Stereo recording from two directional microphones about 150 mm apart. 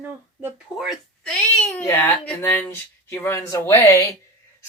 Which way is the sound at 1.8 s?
15° left (ahead or behind).